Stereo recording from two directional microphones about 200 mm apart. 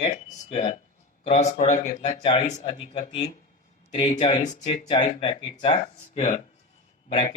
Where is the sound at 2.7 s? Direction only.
25° left (ahead or behind).